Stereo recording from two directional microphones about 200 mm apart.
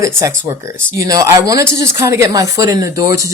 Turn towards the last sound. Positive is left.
turn(degrees=-15)  # may be behind; listen again after turning